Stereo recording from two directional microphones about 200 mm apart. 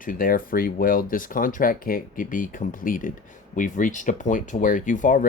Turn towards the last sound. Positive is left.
turn(degrees=40)  # may be behind; listen again after turning